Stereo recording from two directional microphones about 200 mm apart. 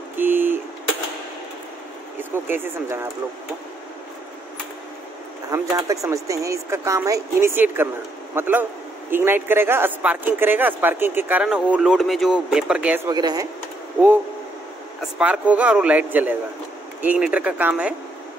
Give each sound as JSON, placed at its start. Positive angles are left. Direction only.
{"t": 0.2, "sound": "vehicle", "side_deg": -10}
{"t": 2.3, "sound": "a man's voice", "side_deg": -10}
{"t": 5.5, "sound": "a man's voice", "side_deg": -15}
{"t": 13.1, "sound": "speech", "side_deg": -20}
{"t": 15.1, "sound": "a man's voice", "side_deg": -5}